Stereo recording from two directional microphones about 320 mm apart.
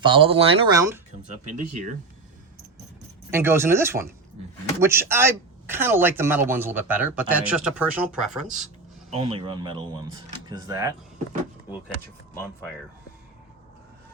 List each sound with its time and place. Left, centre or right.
0.0 s speech: centre
1.7 s speech: right
3.3 s speech: centre
9.1 s speech: centre